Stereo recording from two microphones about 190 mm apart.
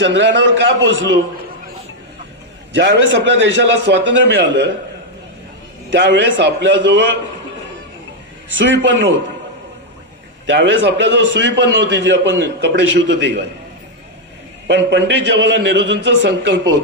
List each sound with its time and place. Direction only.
0.0 s a man's voice: 70° right (ahead or behind)
2.7 s a man's voice: 70° right (ahead or behind)
5.9 s a man's voice: 70° right (ahead or behind)
8.5 s a man's voice: 70° right (ahead or behind)
10.4 s a man's voice: 70° right (ahead or behind)
14.7 s a man's voice: 70° right (ahead or behind)